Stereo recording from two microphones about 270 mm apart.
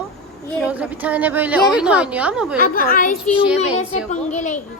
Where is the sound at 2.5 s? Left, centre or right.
Left.